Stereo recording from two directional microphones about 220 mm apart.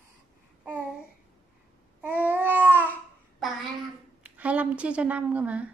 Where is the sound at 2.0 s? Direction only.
10° right (ahead or behind).